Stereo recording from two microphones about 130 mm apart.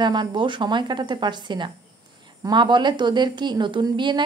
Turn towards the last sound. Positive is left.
turn(degrees=-35)  # may be behind; listen again after turning